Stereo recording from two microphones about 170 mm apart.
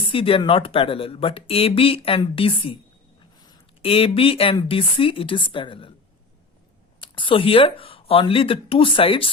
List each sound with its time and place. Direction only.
0.0 s speech: 30° left (ahead or behind)
7.0 s speech: 30° left (ahead or behind)